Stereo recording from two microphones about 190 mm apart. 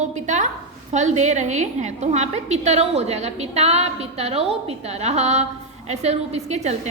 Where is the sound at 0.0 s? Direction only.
40° right (ahead or behind).